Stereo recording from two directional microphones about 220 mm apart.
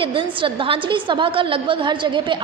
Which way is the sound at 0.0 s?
25° right (ahead or behind).